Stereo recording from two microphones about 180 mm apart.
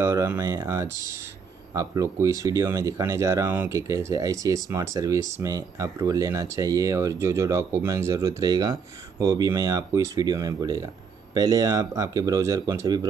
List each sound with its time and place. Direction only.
0.0 s speech: 15° right (ahead or behind)